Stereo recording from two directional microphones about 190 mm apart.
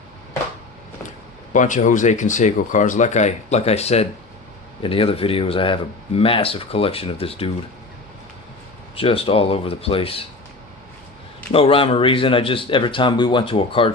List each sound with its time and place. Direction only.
1.5 s speech: 40° left (ahead or behind)
9.0 s speech: 30° left (ahead or behind)
11.5 s speech: 30° left (ahead or behind)